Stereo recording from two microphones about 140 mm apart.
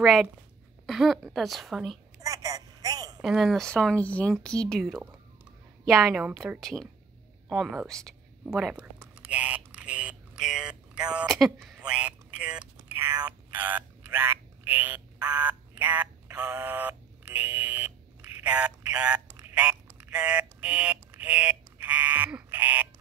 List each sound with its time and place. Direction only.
0.0 s speech: centre (ahead or behind)
2.2 s telephone: 25° right (ahead or behind)
3.2 s speech: centre (ahead or behind)
8.5 s speech: 5° right (ahead or behind)
9.0 s a sound: 10° right (ahead or behind)
19.2 s quack: 20° right (ahead or behind)
19.5 s speech: 10° right (ahead or behind)